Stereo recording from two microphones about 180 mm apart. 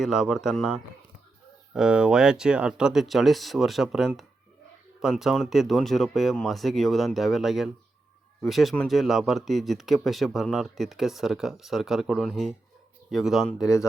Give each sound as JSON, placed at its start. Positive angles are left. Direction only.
{"t": 0.0, "sound": "speech", "side_deg": 0}
{"t": 13.6, "sound": "speech", "side_deg": 20}